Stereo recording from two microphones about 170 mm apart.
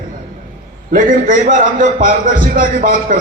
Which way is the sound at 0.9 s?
50° right (ahead or behind).